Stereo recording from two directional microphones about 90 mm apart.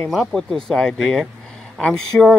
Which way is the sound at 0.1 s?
5° right (ahead or behind).